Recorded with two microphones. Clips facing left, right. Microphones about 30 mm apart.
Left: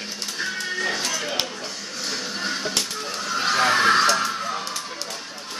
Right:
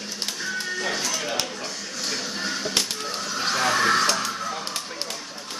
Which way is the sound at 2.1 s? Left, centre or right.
Centre.